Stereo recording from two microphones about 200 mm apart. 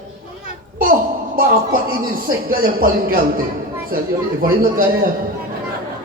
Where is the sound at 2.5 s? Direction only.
50° right (ahead or behind).